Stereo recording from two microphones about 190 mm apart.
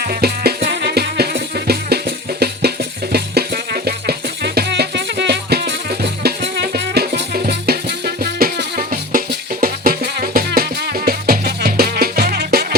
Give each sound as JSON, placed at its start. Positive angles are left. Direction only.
{"t": 0.0, "sound": "music", "side_deg": -55}